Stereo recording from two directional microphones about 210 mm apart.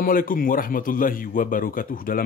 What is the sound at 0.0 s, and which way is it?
Speech, 40° left (ahead or behind).